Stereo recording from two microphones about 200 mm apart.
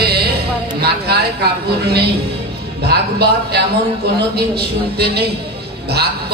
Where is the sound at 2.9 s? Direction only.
55° right (ahead or behind).